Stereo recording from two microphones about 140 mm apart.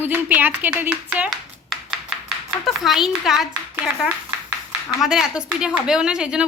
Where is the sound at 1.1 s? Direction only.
5° right (ahead or behind).